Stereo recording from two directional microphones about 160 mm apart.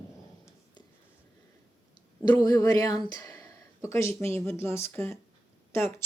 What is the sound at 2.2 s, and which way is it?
Speech, 20° left (ahead or behind).